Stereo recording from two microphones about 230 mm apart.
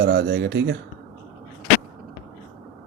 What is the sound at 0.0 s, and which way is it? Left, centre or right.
Speech, right.